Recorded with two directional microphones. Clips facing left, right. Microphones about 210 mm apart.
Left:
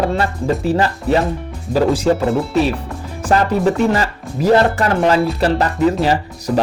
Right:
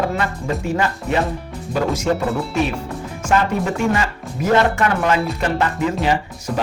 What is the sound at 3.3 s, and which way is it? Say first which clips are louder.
Speech: left 4 dB; 35° left (ahead or behind).